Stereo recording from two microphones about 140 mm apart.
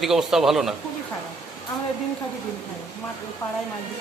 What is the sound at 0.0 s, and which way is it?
Speech, 5° right (ahead or behind).